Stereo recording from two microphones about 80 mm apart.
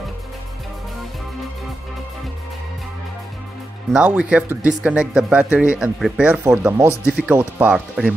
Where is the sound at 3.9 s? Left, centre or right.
Centre.